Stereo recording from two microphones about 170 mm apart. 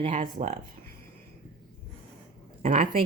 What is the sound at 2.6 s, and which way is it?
Speech, 50° right (ahead or behind).